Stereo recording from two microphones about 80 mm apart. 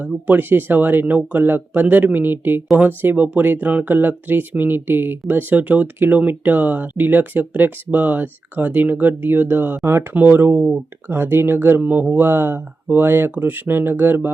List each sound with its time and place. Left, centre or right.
0.3 s speech: right